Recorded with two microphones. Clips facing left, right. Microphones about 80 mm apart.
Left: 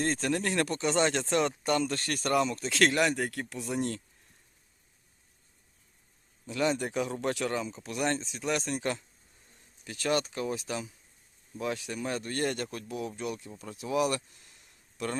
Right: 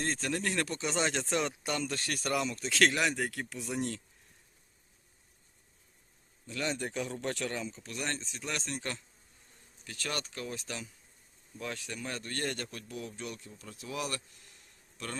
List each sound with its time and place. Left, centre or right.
0.0 s speech: centre
6.5 s speech: centre